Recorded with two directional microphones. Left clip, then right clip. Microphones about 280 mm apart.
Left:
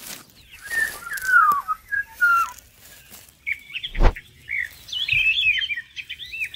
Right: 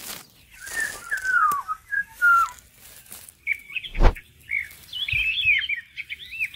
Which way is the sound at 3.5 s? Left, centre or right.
Left.